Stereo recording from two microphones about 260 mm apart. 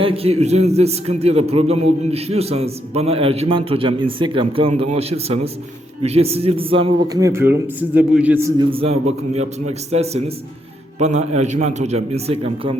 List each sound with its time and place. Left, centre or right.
0.0 s a man's voice: right